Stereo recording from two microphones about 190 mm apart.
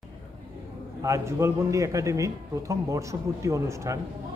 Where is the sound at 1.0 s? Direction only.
15° right (ahead or behind).